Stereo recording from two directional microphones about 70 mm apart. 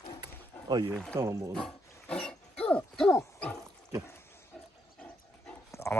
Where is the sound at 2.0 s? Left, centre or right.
Centre.